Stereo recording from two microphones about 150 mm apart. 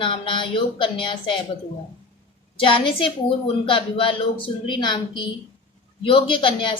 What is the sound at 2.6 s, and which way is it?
Speech, 35° left (ahead or behind).